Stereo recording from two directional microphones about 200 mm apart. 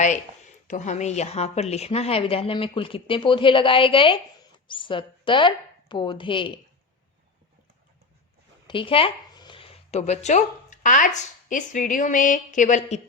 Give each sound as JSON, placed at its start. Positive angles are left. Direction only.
{"t": 0.7, "sound": "a woman's voice", "side_deg": 35}
{"t": 8.6, "sound": "speech", "side_deg": 25}